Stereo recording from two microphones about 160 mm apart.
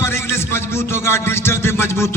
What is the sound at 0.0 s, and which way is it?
A man's voice, 15° left (ahead or behind).